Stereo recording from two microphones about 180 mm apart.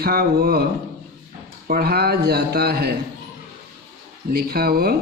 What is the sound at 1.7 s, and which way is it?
A man's voice, 60° right (ahead or behind).